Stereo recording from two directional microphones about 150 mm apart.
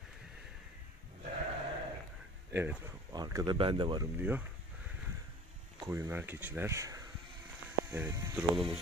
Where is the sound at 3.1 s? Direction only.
25° right (ahead or behind).